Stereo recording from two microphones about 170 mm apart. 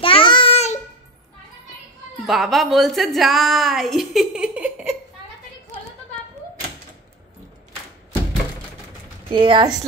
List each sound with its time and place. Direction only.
0.0 s child singing: 30° left (ahead or behind)
2.2 s a woman's voice: centre (ahead or behind)
9.3 s speech: 30° right (ahead or behind)